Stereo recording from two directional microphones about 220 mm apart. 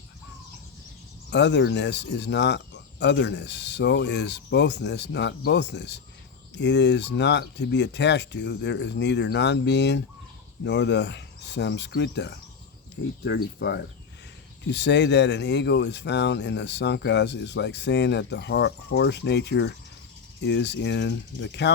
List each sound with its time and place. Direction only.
1.3 s speech: 55° left (ahead or behind)